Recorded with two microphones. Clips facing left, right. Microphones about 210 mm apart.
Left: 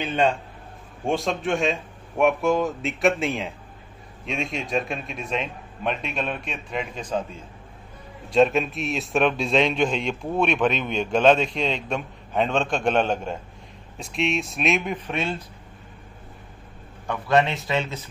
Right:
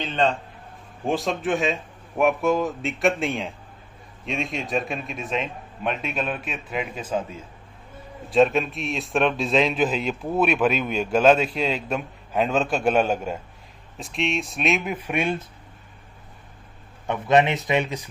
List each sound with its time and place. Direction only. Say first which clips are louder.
0.0 s speech: left 1 dB; 10° left (ahead or behind)
1.0 s a man's voice: even; centre (ahead or behind)
17.1 s speech: right 2 dB; 20° right (ahead or behind)